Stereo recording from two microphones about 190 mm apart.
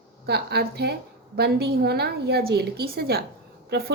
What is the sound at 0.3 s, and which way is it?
A woman's voice, 60° right (ahead or behind).